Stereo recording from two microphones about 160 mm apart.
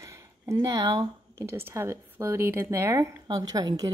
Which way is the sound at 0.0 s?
20° right (ahead or behind).